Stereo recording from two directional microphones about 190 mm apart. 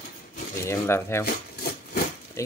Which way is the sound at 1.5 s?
55° left (ahead or behind).